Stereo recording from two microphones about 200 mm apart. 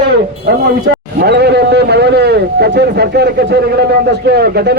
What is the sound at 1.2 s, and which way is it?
A man's voice, 55° right (ahead or behind).